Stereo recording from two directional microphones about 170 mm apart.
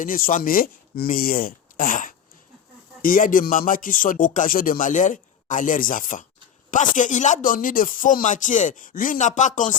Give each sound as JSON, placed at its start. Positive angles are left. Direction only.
{"t": 0.0, "sound": "speech", "side_deg": 50}